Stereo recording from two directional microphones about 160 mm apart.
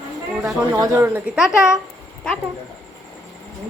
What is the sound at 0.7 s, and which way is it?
Speech, 15° right (ahead or behind).